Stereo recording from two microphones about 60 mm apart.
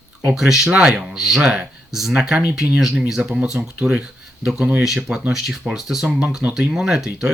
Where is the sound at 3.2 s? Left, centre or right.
Centre.